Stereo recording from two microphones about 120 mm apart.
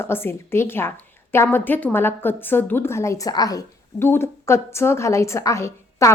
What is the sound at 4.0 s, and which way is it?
A woman's voice, 20° left (ahead or behind).